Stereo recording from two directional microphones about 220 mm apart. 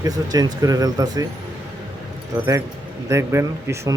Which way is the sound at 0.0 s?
15° right (ahead or behind).